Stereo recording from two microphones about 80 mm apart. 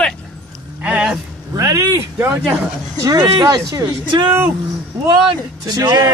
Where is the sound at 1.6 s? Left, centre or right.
Right.